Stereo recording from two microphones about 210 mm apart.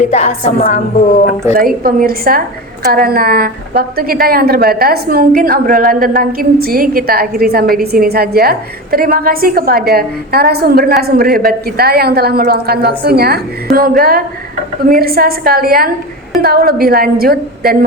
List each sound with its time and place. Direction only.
0.1 s a woman's voice: 30° left (ahead or behind)
1.5 s a woman's voice: 45° right (ahead or behind)